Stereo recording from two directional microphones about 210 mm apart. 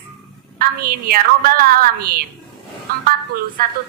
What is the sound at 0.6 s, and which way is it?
A woman's voice, 45° right (ahead or behind).